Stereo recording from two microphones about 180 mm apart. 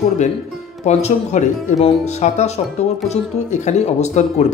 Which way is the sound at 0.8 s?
40° left (ahead or behind).